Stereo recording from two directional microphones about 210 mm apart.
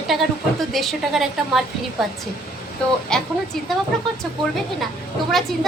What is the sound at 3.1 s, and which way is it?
Speech, 5° left (ahead or behind).